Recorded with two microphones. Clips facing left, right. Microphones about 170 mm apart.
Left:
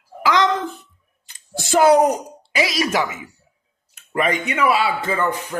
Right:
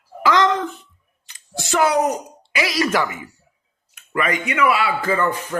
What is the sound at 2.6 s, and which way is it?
Speech, 20° left (ahead or behind).